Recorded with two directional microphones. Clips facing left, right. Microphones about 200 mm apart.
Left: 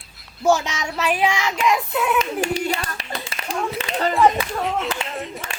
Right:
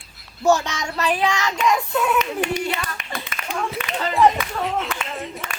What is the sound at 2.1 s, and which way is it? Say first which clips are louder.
Clapping: even; 30° left (ahead or behind).